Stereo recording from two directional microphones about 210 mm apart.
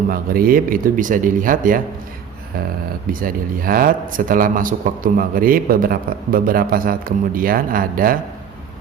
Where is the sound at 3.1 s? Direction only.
40° right (ahead or behind).